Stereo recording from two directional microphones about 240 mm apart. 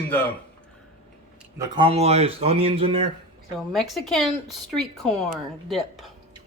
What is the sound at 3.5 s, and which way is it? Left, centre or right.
A woman's voice, centre.